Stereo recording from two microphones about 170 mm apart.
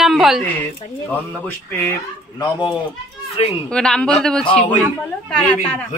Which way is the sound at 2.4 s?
25° left (ahead or behind).